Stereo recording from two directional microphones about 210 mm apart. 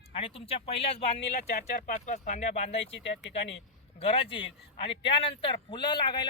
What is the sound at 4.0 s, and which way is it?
A man's voice, 25° left (ahead or behind).